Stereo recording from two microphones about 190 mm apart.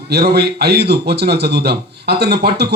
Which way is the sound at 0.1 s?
60° right (ahead or behind).